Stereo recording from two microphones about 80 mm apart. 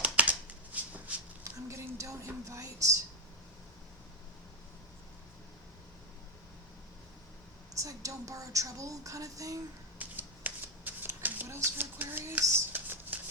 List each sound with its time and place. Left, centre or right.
0.0 s shuffling cards: centre
1.6 s speech: right
7.7 s speech: right
10.0 s shuffling cards: right
11.4 s speech: right